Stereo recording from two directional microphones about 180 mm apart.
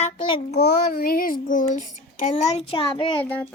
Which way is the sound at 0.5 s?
60° left (ahead or behind).